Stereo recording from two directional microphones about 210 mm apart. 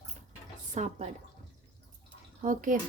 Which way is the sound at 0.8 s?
35° right (ahead or behind).